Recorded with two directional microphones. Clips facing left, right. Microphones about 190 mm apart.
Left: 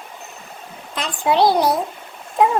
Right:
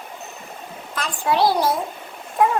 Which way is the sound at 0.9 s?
20° left (ahead or behind).